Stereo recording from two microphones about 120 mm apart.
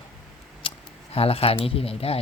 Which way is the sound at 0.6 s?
45° left (ahead or behind).